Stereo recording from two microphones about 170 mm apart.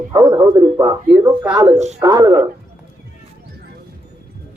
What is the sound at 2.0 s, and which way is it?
Speech, 20° right (ahead or behind).